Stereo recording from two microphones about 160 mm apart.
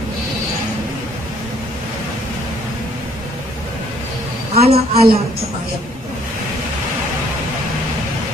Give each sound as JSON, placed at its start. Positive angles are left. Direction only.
{"t": 4.6, "sound": "a man's voice", "side_deg": -75}